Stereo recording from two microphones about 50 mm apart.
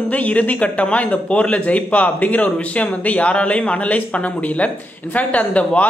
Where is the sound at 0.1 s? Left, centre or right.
Left.